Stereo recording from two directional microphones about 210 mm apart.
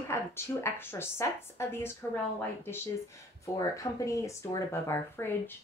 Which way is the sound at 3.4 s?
15° left (ahead or behind).